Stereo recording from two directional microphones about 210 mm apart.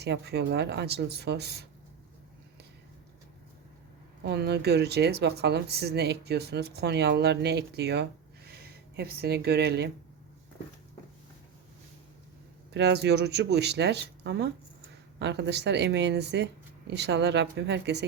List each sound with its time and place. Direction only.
0.0 s speech: 55° right (ahead or behind)
4.2 s speech: 50° right (ahead or behind)
12.7 s speech: 55° right (ahead or behind)